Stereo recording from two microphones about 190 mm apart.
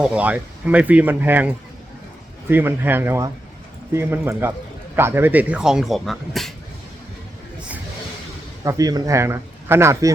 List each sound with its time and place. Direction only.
0.0 s speech: 5° right (ahead or behind)
8.6 s speech: 20° right (ahead or behind)